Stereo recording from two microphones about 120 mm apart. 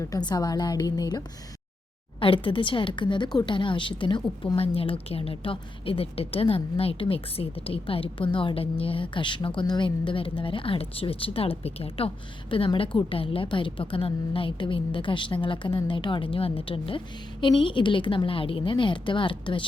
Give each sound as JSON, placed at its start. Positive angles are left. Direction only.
{"t": 0.0, "sound": "a woman's voice", "side_deg": 35}
{"t": 2.2, "sound": "speech", "side_deg": 45}